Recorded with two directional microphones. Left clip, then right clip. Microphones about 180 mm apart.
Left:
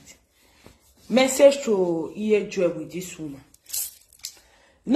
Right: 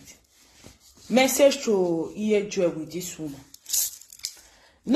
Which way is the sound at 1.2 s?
35° right (ahead or behind).